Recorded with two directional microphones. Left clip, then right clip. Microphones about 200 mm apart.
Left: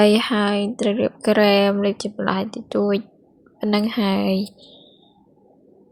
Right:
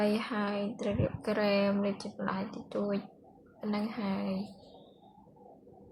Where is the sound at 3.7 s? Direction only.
40° left (ahead or behind).